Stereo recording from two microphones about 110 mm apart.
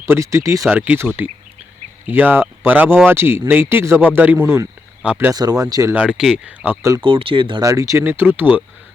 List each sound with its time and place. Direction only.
0.0 s speech: 25° right (ahead or behind)
0.7 s speech: 15° right (ahead or behind)
5.3 s speech: 35° right (ahead or behind)
5.9 s speech: 10° right (ahead or behind)
7.0 s speech: 55° right (ahead or behind)
7.6 s speech: 30° right (ahead or behind)
8.0 s speech: 20° right (ahead or behind)